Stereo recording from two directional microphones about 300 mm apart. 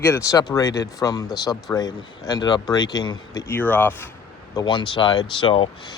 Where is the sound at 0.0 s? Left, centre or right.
Centre.